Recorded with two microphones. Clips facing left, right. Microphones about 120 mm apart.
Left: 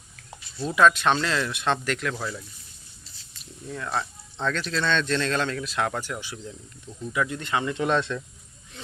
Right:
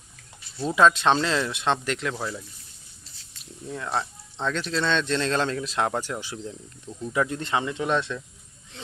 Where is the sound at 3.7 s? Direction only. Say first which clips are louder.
Right 1 dB; 25° right (ahead or behind).